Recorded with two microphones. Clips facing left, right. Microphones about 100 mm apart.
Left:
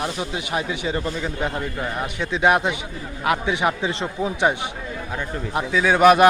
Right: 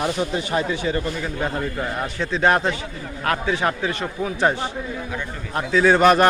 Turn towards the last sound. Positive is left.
turn(degrees=10)  # may be behind; listen again after turning